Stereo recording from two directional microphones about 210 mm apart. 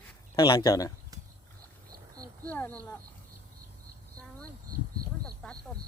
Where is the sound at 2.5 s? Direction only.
10° left (ahead or behind).